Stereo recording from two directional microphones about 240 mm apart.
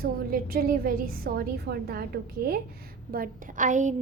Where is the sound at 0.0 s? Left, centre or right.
Right.